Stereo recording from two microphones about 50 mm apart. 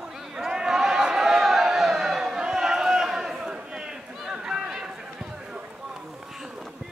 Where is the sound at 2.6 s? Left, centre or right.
Centre.